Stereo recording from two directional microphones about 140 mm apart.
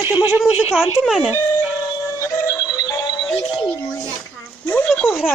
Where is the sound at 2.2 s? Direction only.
25° left (ahead or behind).